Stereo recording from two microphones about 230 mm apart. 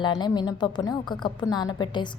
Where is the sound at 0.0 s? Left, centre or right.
Centre.